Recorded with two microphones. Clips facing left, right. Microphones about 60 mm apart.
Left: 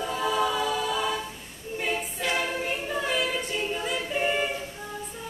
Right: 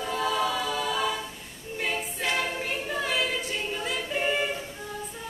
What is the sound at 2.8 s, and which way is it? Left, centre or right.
A capella, centre.